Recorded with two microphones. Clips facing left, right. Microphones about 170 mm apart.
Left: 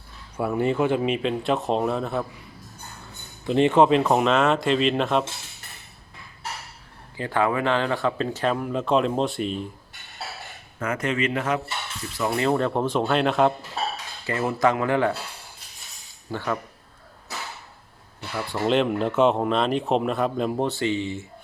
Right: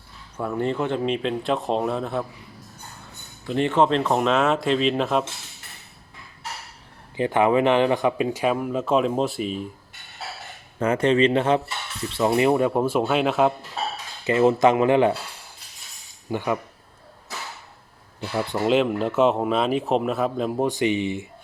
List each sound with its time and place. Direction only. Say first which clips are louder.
0.3 s speech: left 2 dB; 10° left (ahead or behind)
3.4 s speech: left 3 dB; 20° left (ahead or behind)
4.2 s speech: even; centre (ahead or behind)
7.2 s speech: right 5 dB; 20° right (ahead or behind); by 9.6 s 5° right (ahead or behind)
10.8 s speech: right 7 dB; 30° right (ahead or behind); by 13.5 s 5° right (ahead or behind)
14.3 s speech: right 5 dB; 20° right (ahead or behind)
16.3 s speech: right 3 dB; 15° right (ahead or behind)
18.5 s speech: right 1 dB; 5° right (ahead or behind)
20.7 s speech: right 3 dB; 15° right (ahead or behind)